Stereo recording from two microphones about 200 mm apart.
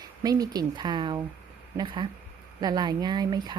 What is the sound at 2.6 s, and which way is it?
Speech, 20° right (ahead or behind).